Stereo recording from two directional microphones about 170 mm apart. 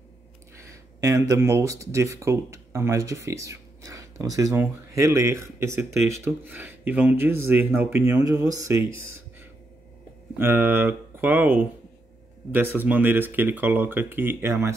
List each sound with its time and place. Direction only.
0.6 s speech: 15° right (ahead or behind)